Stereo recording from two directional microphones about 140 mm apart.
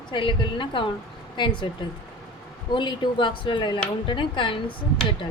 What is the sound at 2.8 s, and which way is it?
Speech, 35° left (ahead or behind).